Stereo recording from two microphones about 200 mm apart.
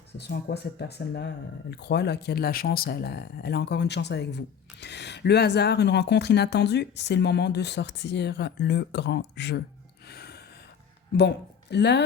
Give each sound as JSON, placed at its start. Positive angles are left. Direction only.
{"t": 0.2, "sound": "speech", "side_deg": 55}
{"t": 10.1, "sound": "gasp", "side_deg": 50}
{"t": 11.2, "sound": "speech", "side_deg": 60}